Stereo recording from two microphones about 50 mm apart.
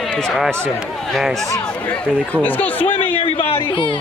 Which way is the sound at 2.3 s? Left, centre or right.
Left.